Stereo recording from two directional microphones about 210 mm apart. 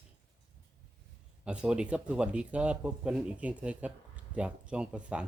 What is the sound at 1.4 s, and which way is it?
Speech, 5° right (ahead or behind).